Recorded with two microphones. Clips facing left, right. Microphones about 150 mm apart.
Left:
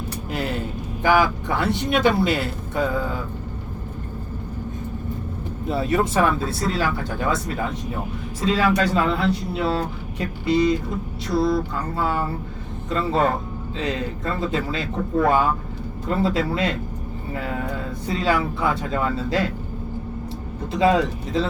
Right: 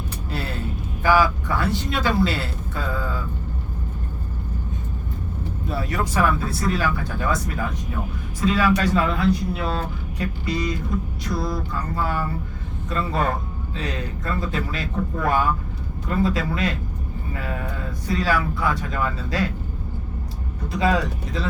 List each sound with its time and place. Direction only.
0.3 s a sound: 15° left (ahead or behind)
1.0 s speech: 20° left (ahead or behind)
5.6 s speech: 25° left (ahead or behind)
11.9 s speech: 25° left (ahead or behind)
18.1 s speech: 25° left (ahead or behind)
20.7 s speech: 25° left (ahead or behind)